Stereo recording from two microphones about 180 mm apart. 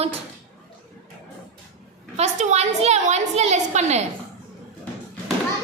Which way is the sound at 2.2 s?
40° right (ahead or behind).